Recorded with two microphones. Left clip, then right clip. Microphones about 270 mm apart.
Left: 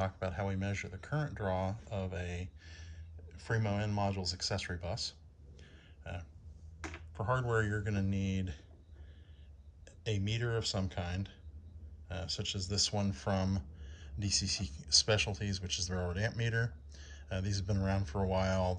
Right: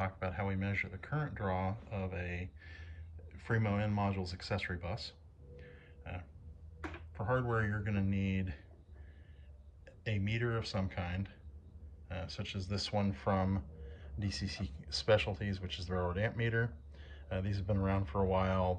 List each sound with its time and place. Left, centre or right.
0.0 s speech: centre
5.6 s grunt: centre
7.2 s speech: centre
9.8 s speech: centre
14.3 s speech: centre
15.9 s speech: centre